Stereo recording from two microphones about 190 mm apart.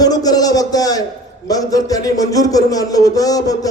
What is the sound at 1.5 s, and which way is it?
Speech, 20° left (ahead or behind).